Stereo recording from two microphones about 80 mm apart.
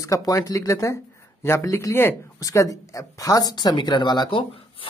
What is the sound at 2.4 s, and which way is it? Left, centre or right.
Speech, left.